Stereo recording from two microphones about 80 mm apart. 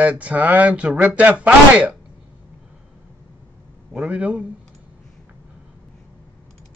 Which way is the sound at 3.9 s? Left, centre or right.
Centre.